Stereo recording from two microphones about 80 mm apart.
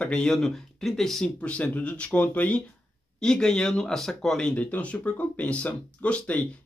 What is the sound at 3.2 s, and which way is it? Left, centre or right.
Speech, centre.